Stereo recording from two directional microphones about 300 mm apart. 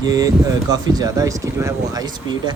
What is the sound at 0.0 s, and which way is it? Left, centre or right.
Speech, centre.